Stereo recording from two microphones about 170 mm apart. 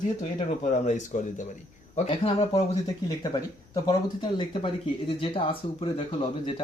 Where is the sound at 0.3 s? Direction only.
40° left (ahead or behind).